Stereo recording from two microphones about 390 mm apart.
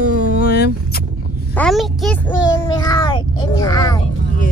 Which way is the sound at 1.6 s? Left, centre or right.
Centre.